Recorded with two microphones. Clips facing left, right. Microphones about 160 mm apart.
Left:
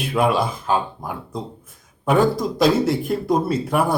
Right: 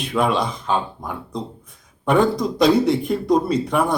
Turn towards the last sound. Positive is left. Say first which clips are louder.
# even
turn(degrees=5)  # may be behind; listen again after turning